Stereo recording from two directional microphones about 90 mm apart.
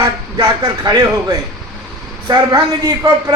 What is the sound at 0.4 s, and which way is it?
A woman's voice, 45° right (ahead or behind).